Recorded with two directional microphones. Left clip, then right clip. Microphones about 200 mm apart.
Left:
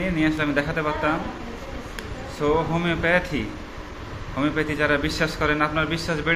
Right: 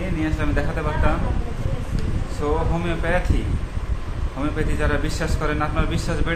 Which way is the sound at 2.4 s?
10° left (ahead or behind).